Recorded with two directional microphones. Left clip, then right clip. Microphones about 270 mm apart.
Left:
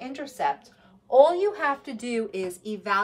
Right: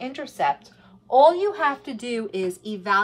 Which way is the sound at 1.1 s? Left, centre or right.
Centre.